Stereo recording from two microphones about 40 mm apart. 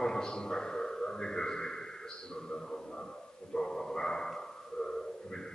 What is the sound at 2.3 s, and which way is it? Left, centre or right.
Speech, left.